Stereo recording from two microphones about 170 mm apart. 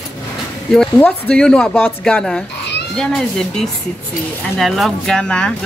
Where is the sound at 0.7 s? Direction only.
5° left (ahead or behind).